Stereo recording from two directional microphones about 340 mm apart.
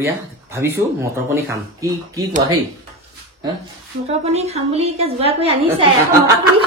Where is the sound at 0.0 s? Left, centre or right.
Centre.